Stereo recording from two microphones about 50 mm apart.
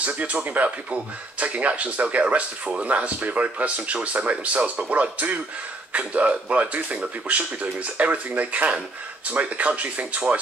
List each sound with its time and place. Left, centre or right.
0.0 s speech: right